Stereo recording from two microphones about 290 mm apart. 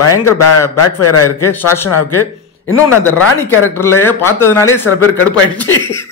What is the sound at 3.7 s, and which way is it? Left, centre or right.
Speech, centre.